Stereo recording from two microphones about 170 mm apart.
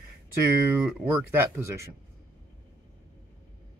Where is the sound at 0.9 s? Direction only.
15° right (ahead or behind).